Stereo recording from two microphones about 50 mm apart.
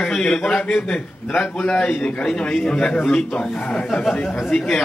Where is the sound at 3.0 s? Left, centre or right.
Centre.